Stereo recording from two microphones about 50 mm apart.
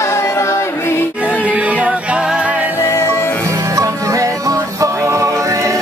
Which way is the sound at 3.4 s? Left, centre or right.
Right.